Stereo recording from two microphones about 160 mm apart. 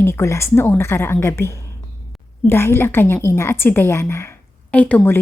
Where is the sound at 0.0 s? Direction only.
15° left (ahead or behind).